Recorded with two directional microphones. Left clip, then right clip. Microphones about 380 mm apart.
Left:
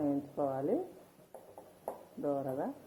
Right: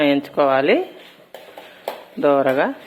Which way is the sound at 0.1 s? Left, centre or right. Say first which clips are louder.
Right 19 dB; right.